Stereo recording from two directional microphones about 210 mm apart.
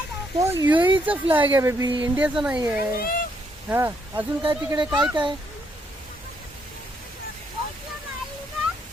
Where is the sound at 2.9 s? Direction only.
45° left (ahead or behind).